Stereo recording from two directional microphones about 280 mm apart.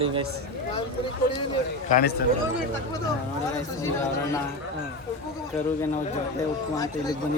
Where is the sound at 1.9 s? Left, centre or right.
Left.